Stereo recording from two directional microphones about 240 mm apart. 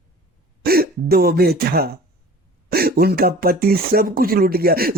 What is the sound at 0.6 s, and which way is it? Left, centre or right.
Speech, right.